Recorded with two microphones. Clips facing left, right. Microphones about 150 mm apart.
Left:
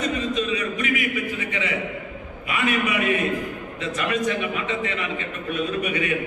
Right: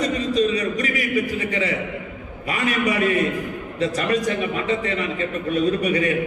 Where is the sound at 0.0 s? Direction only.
35° right (ahead or behind).